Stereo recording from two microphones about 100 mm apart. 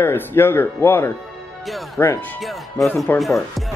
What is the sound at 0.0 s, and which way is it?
Speech, 25° left (ahead or behind).